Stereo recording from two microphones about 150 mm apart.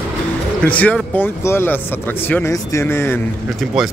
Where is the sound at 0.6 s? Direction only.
10° left (ahead or behind).